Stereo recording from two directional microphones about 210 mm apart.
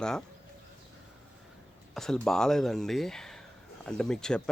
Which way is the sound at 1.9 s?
Centre (ahead or behind).